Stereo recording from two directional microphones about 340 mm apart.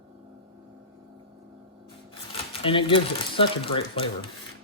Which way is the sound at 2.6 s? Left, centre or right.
Centre.